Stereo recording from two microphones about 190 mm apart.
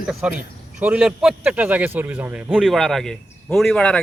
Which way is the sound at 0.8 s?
5° right (ahead or behind).